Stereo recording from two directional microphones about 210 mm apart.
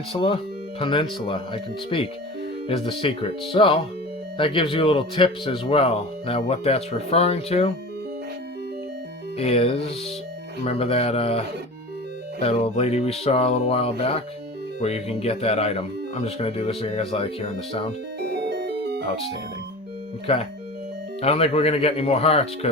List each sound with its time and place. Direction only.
0.1 s speech: 25° left (ahead or behind)
9.4 s speech: 30° left (ahead or behind)
18.2 s music: 50° right (ahead or behind)
20.2 s speech: 25° left (ahead or behind)